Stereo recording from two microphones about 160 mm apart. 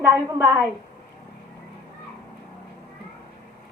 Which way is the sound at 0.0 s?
15° right (ahead or behind).